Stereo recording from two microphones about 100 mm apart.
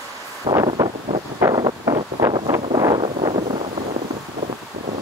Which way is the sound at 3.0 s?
80° right.